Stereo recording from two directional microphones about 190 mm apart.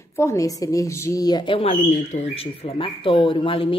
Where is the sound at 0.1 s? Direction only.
15° left (ahead or behind).